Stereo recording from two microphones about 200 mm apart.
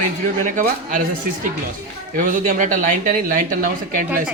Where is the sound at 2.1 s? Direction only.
40° right (ahead or behind).